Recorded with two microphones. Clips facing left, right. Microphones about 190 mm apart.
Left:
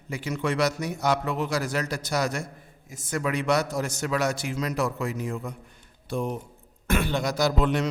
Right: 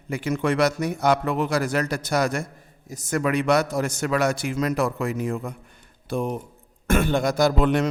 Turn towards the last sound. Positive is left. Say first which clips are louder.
# right 4 dB
turn(degrees=-55)  # may be behind; listen again after turning